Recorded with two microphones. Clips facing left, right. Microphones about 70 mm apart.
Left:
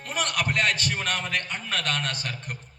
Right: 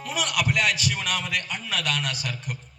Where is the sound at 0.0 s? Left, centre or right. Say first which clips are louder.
Right 1 dB; left.